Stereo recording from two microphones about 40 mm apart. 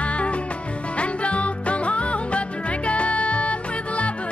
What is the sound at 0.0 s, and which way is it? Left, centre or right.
Music, left.